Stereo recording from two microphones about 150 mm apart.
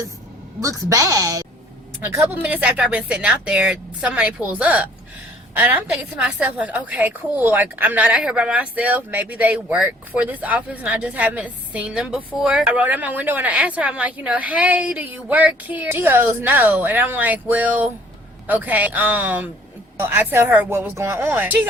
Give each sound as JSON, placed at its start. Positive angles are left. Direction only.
{"t": 0.6, "sound": "a woman's voice", "side_deg": -20}
{"t": 2.1, "sound": "a woman's voice", "side_deg": -10}